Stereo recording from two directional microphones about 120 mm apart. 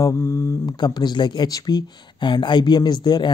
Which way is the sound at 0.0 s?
25° left (ahead or behind).